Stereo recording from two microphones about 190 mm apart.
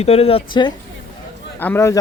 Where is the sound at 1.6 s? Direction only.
10° left (ahead or behind).